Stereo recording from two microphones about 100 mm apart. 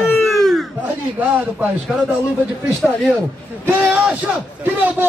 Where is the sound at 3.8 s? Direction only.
10° right (ahead or behind).